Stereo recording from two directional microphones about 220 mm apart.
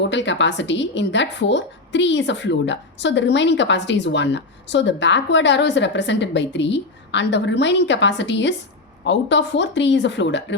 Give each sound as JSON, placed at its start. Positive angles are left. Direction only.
{"t": 0.0, "sound": "a woman's voice", "side_deg": 55}